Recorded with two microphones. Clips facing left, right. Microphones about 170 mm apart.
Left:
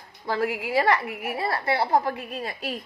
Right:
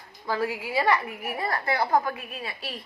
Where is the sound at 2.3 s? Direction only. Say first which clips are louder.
Left 5 dB; 40° left (ahead or behind).